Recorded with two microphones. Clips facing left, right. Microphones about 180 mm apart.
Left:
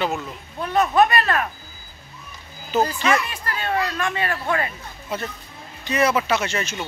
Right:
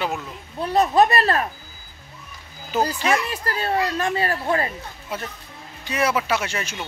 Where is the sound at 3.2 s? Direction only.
35° right (ahead or behind).